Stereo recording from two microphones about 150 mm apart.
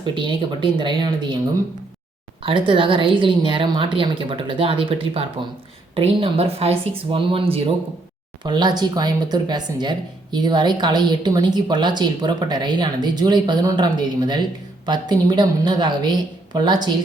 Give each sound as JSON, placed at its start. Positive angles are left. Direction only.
{"t": 0.0, "sound": "a woman's voice", "side_deg": -30}
{"t": 2.4, "sound": "a woman's voice", "side_deg": -35}